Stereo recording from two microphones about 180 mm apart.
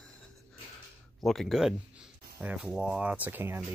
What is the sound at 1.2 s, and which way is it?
Speech, centre (ahead or behind).